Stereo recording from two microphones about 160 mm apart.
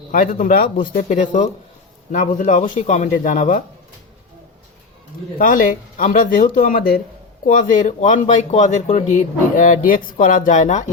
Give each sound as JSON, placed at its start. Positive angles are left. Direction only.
{"t": 0.1, "sound": "speech", "side_deg": 55}
{"t": 0.9, "sound": "speech", "side_deg": 45}
{"t": 5.4, "sound": "speech", "side_deg": 60}